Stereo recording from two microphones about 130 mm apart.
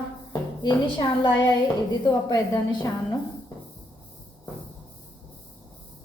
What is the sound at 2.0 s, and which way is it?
Speech, 30° left (ahead or behind).